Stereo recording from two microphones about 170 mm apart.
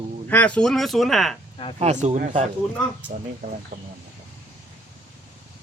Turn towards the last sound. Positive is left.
turn(degrees=-60)  # may be behind; listen again after turning